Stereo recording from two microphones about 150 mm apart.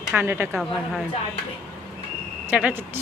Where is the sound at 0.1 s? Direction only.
15° right (ahead or behind).